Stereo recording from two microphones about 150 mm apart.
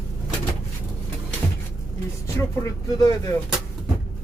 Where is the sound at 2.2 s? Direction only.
20° left (ahead or behind).